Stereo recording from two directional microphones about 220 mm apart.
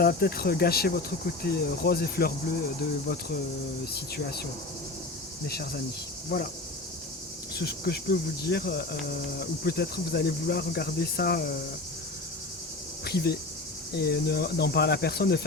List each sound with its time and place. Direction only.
0.0 s speech: 45° left (ahead or behind)
5.5 s speech: 45° left (ahead or behind)
7.5 s speech: 45° left (ahead or behind)
13.1 s speech: 45° left (ahead or behind)